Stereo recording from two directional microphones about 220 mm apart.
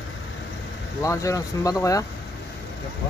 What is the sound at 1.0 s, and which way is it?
Speech, 15° left (ahead or behind).